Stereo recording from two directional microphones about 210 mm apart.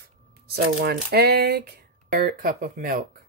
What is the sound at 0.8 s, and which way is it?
Speech, 50° right (ahead or behind).